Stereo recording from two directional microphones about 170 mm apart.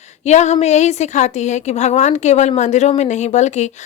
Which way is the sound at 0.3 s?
40° left (ahead or behind).